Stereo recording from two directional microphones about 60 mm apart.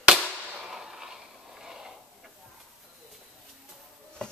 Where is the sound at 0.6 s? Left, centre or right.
Centre.